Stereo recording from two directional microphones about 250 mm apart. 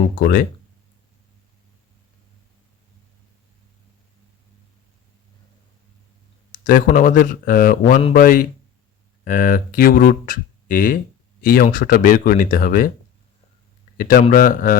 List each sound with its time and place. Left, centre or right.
0.2 s speech: left
6.5 s speech: left
13.9 s speech: left